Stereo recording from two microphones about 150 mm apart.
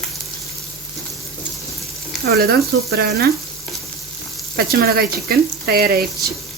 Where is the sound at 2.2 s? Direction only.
90° right.